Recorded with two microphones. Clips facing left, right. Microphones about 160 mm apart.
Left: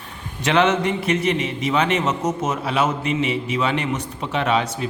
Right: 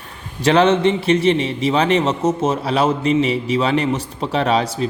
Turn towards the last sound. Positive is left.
turn(degrees=-35)  # may be behind; listen again after turning